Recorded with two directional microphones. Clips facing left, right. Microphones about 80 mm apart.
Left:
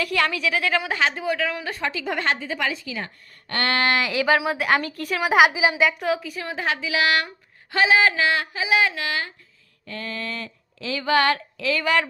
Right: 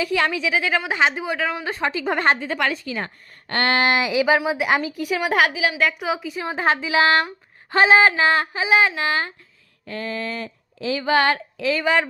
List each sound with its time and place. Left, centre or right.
0.0 s speech: centre
0.9 s speech: right
2.4 s a woman's voice: right
2.8 s a woman's voice: right
3.5 s speech: right; by 5.2 s centre
5.2 s a woman's voice: centre
5.8 s speech: centre
6.3 s speech: right